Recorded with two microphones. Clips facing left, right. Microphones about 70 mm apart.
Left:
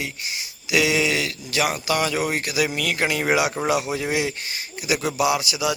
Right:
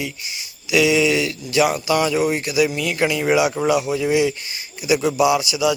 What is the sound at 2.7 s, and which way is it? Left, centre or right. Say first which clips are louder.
Speech: right 2 dB; left.